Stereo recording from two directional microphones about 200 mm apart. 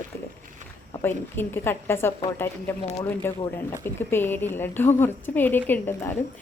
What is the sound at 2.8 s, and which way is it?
Speech, 20° left (ahead or behind).